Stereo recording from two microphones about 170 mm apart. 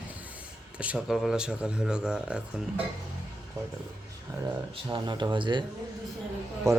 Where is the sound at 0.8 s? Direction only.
5° right (ahead or behind).